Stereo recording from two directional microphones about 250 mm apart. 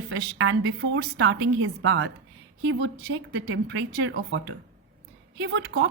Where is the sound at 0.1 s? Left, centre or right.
Right.